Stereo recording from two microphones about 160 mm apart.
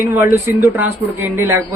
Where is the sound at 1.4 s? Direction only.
15° right (ahead or behind).